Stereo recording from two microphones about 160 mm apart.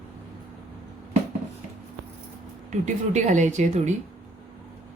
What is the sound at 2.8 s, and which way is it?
Speech, 50° right (ahead or behind).